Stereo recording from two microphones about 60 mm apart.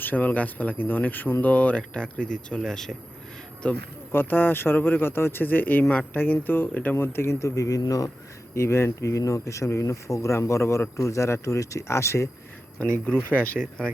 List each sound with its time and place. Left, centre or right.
0.0 s speech: left
4.1 s speech: left
8.5 s speech: left
13.2 s speech: left
13.6 s speech: centre